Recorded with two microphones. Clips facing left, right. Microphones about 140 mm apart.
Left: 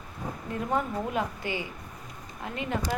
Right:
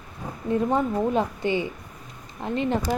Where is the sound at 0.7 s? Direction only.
25° right (ahead or behind).